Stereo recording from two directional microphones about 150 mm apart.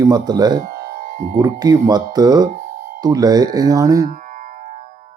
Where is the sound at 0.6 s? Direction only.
80° right; by 1.4 s 60° right (ahead or behind).